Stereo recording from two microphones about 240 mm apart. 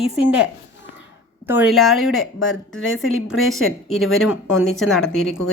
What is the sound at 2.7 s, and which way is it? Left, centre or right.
Speech, left.